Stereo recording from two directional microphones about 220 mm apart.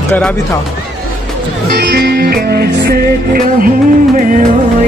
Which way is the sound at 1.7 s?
50° right (ahead or behind).